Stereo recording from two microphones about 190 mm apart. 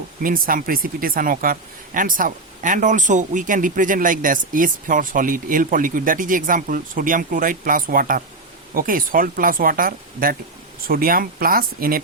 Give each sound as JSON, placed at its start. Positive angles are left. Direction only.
{"t": 0.2, "sound": "speech", "side_deg": -45}